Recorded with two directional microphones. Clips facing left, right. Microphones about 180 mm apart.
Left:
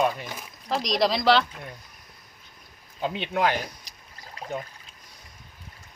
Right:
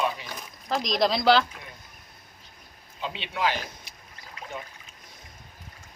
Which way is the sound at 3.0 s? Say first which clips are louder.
Left 4 dB; 45° left (ahead or behind).